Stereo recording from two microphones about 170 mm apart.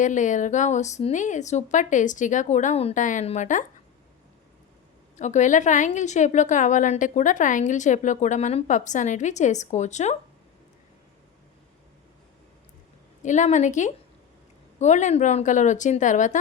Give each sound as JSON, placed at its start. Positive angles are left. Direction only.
{"t": 0.0, "sound": "a woman's voice", "side_deg": 50}
{"t": 5.1, "sound": "a woman's voice", "side_deg": 45}
{"t": 13.2, "sound": "a woman's voice", "side_deg": 45}